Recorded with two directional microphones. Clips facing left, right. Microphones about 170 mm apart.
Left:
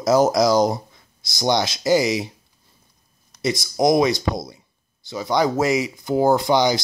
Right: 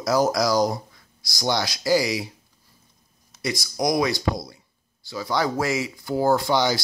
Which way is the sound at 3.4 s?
20° left (ahead or behind).